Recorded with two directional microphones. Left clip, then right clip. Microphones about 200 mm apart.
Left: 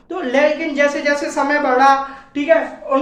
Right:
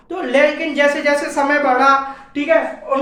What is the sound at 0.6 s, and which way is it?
A woman's voice, centre (ahead or behind).